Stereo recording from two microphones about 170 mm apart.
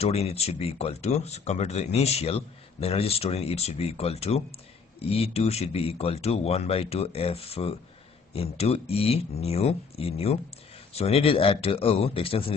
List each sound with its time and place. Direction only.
0.0 s speech: 35° left (ahead or behind)